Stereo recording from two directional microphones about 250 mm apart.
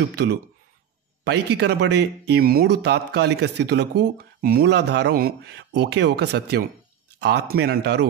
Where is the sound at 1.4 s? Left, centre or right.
Right.